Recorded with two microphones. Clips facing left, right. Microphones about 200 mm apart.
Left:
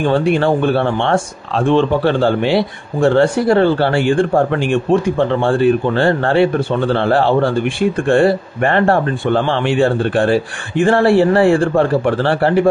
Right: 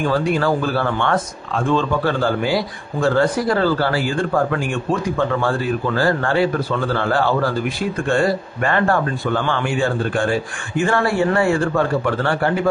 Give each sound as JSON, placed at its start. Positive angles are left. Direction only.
{"t": 0.0, "sound": "speech", "side_deg": 30}